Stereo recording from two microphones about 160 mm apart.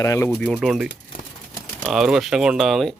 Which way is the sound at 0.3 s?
5° left (ahead or behind).